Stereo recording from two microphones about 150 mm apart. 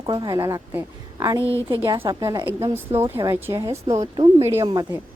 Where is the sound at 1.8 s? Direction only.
35° right (ahead or behind); by 5.0 s 20° right (ahead or behind).